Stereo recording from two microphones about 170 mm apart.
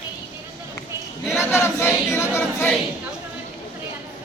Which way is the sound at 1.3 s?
15° left (ahead or behind).